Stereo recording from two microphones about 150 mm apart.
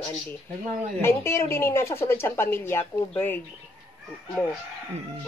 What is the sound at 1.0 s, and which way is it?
Speech, 15° left (ahead or behind).